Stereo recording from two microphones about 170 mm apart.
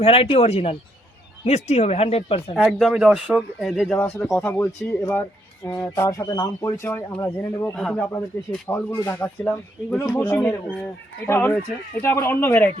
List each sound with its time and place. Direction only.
0.0 s speech: 35° left (ahead or behind)
2.6 s speech: centre (ahead or behind)
5.9 s speech: 20° left (ahead or behind)